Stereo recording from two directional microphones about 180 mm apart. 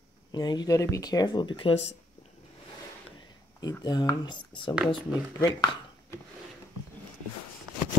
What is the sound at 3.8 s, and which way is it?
Speech, 20° left (ahead or behind).